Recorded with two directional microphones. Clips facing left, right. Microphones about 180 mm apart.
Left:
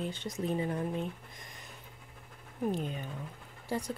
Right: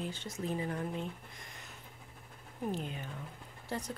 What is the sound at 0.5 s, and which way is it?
Speech, 25° left (ahead or behind).